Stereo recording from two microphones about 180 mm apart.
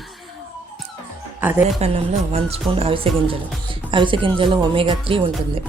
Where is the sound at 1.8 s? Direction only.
35° right (ahead or behind).